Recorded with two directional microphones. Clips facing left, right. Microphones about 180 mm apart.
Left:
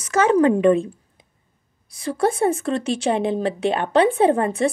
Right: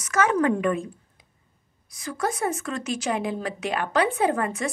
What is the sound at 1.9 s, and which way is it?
A woman's voice, 30° left (ahead or behind).